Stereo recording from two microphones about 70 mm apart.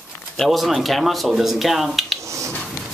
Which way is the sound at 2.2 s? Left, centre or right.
Right.